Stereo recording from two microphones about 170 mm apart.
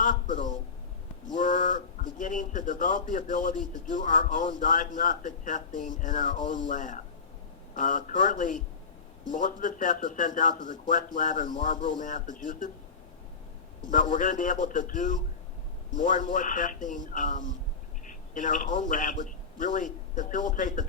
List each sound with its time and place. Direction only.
0.0 s a sound: 50° left (ahead or behind)
1.3 s a man's voice: 50° left (ahead or behind)
13.9 s a man's voice: 50° left (ahead or behind)